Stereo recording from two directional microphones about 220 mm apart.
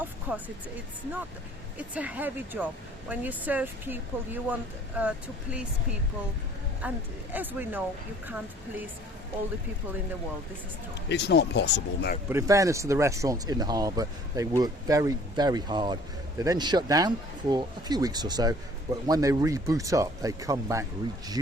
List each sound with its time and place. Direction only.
0.0 s music: 5° right (ahead or behind)
1.9 s speech: 5° right (ahead or behind)
6.8 s speech: 5° right (ahead or behind)
11.1 s speech: 50° left (ahead or behind)
12.3 s speech: 15° right (ahead or behind)